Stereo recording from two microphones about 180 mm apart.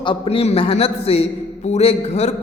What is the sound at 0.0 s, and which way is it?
Speech, 30° left (ahead or behind).